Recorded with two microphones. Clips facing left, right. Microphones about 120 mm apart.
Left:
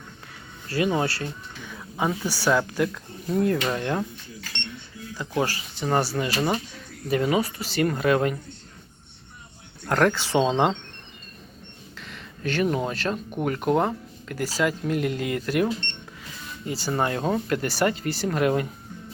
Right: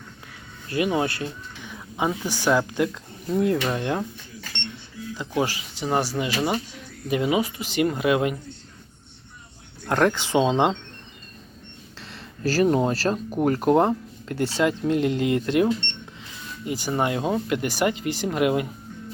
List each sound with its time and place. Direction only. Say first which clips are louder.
0.7 s speech: right 1 dB; 15° right (ahead or behind)
5.1 s speech: right 1 dB; 20° right (ahead or behind)
9.8 s speech: even; 20° right (ahead or behind)
11.9 s speech: right 1 dB; 30° right (ahead or behind); by 18.7 s 15° right (ahead or behind)